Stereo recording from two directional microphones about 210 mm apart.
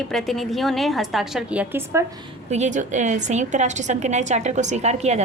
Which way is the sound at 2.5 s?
35° right (ahead or behind).